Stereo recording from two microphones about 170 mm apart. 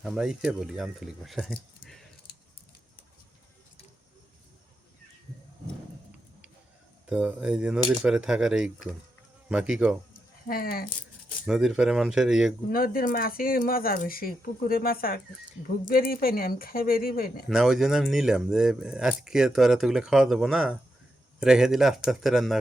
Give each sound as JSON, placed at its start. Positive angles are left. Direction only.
{"t": 0.0, "sound": "speech", "side_deg": 0}
{"t": 7.1, "sound": "speech", "side_deg": -5}
{"t": 10.5, "sound": "speech", "side_deg": 60}
{"t": 11.4, "sound": "speech", "side_deg": -5}
{"t": 12.7, "sound": "speech", "side_deg": 60}
{"t": 17.5, "sound": "speech", "side_deg": 0}